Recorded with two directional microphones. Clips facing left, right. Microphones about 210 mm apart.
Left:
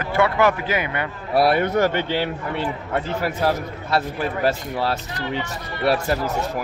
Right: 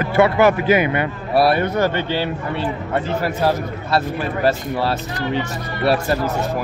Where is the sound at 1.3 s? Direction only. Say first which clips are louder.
Right 1 dB; 20° left (ahead or behind).